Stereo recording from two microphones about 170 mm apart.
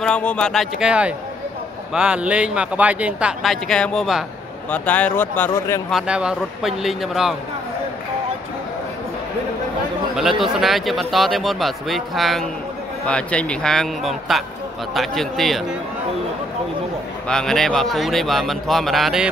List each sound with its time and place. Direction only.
0.0 s speech: 5° left (ahead or behind)
5.9 s speech: 5° right (ahead or behind)
10.4 s speech: centre (ahead or behind)
17.3 s speech: 5° left (ahead or behind)